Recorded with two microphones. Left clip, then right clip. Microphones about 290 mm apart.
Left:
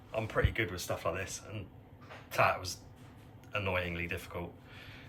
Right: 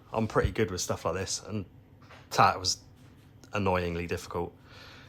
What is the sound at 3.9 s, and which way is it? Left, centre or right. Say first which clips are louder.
Speech: right 4 dB; right.